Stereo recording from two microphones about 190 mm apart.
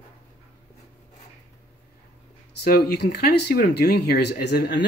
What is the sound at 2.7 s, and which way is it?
Speech, 55° left (ahead or behind).